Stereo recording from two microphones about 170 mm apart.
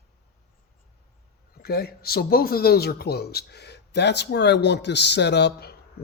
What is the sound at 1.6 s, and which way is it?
A man's voice, 65° left (ahead or behind).